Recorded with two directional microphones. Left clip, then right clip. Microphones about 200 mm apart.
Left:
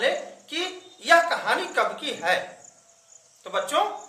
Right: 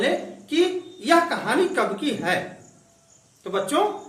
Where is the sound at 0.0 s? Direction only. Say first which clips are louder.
Right 1 dB; 20° left (ahead or behind).